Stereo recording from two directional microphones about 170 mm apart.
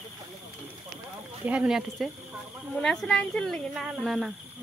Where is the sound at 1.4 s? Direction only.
5° right (ahead or behind).